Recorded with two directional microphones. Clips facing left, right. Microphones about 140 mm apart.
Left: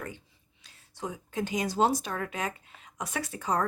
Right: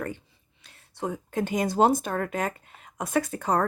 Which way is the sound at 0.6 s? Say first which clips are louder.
Right 5 dB; 60° right (ahead or behind).